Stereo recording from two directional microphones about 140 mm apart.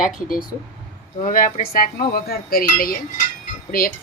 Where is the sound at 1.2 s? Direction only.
75° left (ahead or behind).